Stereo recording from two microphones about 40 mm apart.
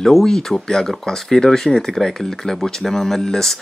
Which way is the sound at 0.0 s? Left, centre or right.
Centre.